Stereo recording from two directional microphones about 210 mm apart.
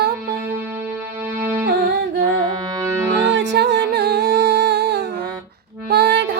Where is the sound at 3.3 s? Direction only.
55° right (ahead or behind).